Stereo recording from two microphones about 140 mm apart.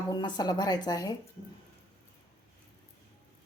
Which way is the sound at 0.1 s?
30° left (ahead or behind).